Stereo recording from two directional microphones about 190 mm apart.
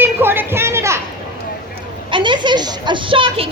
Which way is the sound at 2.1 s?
25° right (ahead or behind).